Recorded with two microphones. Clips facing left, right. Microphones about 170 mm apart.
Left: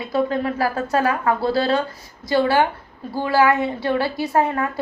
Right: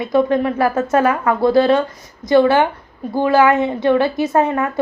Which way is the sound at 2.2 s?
20° right (ahead or behind).